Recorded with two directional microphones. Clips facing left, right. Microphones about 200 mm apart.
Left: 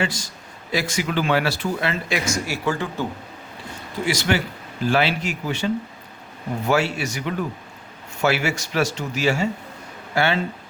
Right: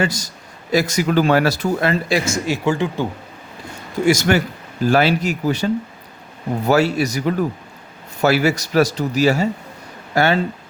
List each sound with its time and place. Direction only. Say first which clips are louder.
0.0 s speech: right 4 dB; 40° right (ahead or behind); by 3.1 s 15° right (ahead or behind)
4.0 s speech: right 7 dB; 45° right (ahead or behind)